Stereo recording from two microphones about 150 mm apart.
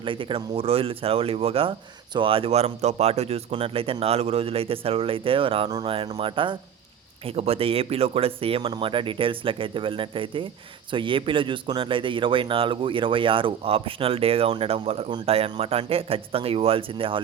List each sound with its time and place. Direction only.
0.0 s speech: 35° right (ahead or behind)